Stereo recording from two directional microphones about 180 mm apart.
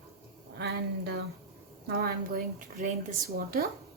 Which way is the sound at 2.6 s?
45° right (ahead or behind).